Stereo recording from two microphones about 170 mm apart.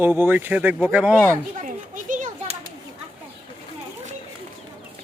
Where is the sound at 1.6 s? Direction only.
50° right (ahead or behind).